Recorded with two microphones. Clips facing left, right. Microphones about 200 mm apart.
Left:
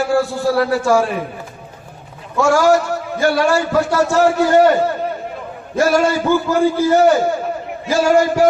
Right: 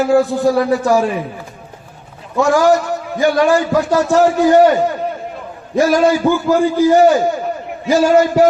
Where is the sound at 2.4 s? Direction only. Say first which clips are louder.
Even; 15° right (ahead or behind).